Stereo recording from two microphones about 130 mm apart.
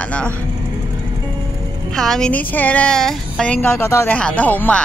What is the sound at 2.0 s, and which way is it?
A woman's voice, 5° left (ahead or behind).